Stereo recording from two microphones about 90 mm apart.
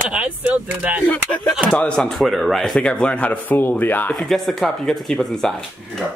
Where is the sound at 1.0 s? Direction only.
20° left (ahead or behind).